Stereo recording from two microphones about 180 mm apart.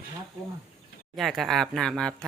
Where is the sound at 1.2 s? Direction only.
Centre (ahead or behind).